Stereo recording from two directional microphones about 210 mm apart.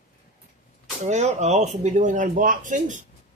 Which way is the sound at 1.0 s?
35° right (ahead or behind).